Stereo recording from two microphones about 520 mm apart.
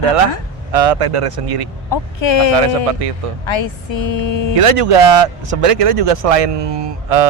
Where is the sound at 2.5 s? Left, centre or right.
Right.